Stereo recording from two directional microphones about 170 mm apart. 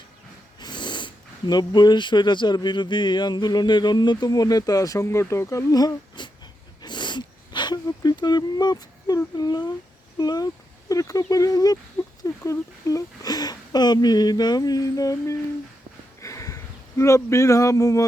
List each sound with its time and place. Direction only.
0.6 s speech: 25° left (ahead or behind)
6.8 s a sound: 25° left (ahead or behind)
10.2 s speech: 25° left (ahead or behind)
16.2 s sniff: 20° left (ahead or behind)
17.0 s speech: 15° left (ahead or behind)